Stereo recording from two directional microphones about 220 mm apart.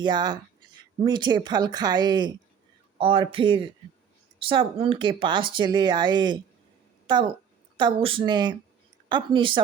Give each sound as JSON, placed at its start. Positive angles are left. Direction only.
{"t": 0.0, "sound": "speech", "side_deg": -20}